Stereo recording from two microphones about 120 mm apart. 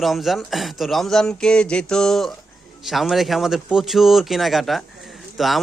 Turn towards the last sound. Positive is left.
turn(degrees=0)  # may be behind; listen again after turning